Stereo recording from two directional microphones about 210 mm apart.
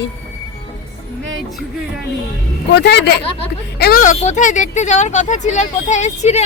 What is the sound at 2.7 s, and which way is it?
Speech, 50° left (ahead or behind).